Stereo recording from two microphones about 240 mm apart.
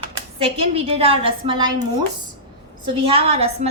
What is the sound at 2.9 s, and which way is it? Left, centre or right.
Speech, right.